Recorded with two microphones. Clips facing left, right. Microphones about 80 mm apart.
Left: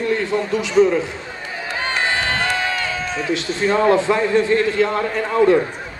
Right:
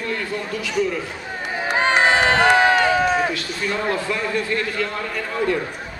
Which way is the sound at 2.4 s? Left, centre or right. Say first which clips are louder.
Right 7 dB; right.